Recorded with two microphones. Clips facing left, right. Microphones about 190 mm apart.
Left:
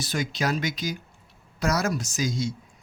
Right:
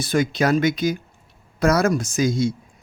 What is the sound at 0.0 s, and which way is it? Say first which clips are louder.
Speech: right 8 dB; 55° right (ahead or behind).